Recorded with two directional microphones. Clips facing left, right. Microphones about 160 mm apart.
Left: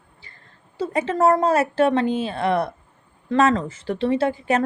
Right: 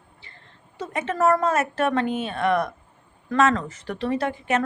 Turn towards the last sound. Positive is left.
turn(degrees=30)  # may be behind; listen again after turning